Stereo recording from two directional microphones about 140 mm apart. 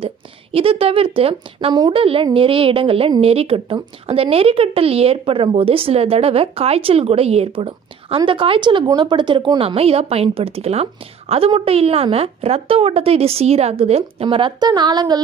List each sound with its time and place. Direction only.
0.0 s a woman's voice: 45° right (ahead or behind)